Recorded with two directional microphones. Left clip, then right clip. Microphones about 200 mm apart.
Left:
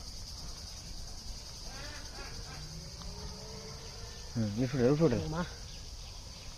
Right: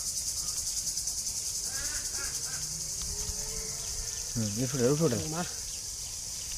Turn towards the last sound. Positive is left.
turn(degrees=-20)  # may be behind; listen again after turning